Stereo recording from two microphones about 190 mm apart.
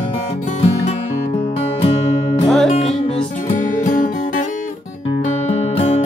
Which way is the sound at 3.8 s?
45° left (ahead or behind).